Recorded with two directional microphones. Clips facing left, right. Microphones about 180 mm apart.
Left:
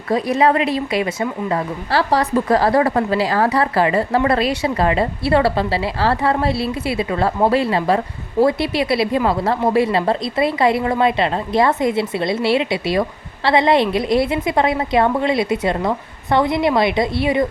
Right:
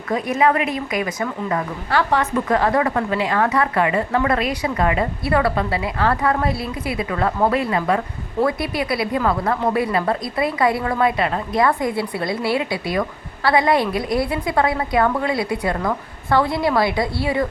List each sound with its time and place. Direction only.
0.1 s a woman's voice: 35° left (ahead or behind)